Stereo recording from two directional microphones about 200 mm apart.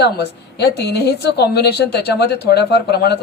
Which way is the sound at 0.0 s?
55° left (ahead or behind).